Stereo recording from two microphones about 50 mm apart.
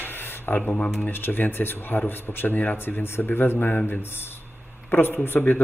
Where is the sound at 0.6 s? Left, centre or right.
Left.